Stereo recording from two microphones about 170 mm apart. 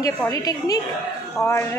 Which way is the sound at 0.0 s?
20° left (ahead or behind).